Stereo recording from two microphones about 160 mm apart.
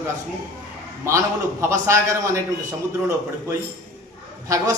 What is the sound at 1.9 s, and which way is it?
Speech, 20° right (ahead or behind).